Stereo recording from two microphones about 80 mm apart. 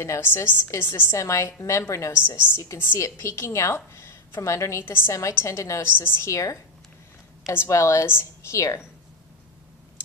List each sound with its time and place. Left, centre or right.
0.0 s a woman's voice: left